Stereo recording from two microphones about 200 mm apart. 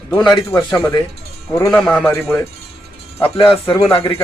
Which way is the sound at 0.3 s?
15° left (ahead or behind).